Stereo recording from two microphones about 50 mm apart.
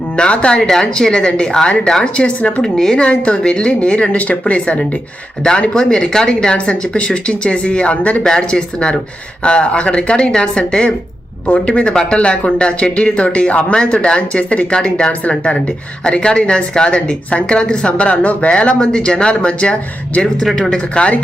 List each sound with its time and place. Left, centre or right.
0.2 s speech: centre
2.6 s speech: centre